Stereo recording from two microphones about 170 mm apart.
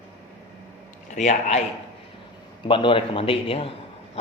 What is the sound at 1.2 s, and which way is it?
Speech, 40° left (ahead or behind).